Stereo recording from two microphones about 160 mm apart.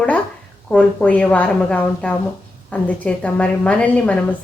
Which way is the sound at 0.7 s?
10° left (ahead or behind).